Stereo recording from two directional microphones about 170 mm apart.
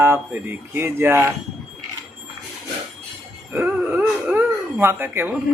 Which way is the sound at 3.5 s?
10° right (ahead or behind).